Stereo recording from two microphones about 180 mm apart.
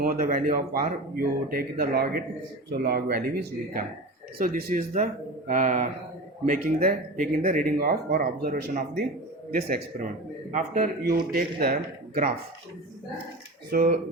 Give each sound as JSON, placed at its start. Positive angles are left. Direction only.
{"t": 0.0, "sound": "speech", "side_deg": -50}
{"t": 10.5, "sound": "speech", "side_deg": -45}
{"t": 11.3, "sound": "speech", "side_deg": -55}
{"t": 13.7, "sound": "speech", "side_deg": -55}